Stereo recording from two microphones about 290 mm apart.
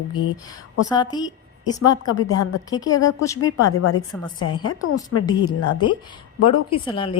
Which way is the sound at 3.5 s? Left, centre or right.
Left.